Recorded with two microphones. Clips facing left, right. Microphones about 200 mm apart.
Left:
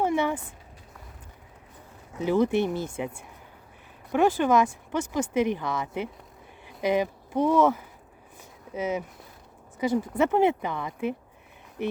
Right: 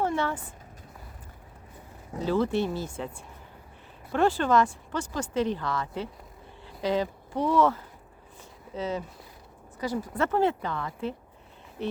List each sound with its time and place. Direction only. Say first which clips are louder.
0.0 s a sound: left 3 dB; 15° left (ahead or behind)
2.2 s speech: left 3 dB; 15° left (ahead or behind)
4.1 s speech: left 2 dB; 15° left (ahead or behind)